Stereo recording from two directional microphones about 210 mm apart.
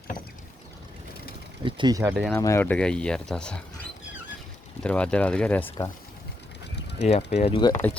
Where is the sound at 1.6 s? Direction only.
20° right (ahead or behind).